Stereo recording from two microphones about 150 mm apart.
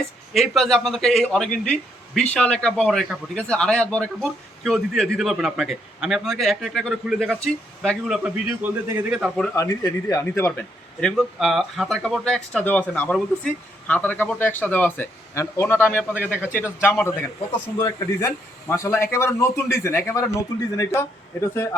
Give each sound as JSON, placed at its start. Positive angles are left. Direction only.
{"t": 0.3, "sound": "a man's voice", "side_deg": 0}
{"t": 9.6, "sound": "speech", "side_deg": 20}
{"t": 11.0, "sound": "speech", "side_deg": 0}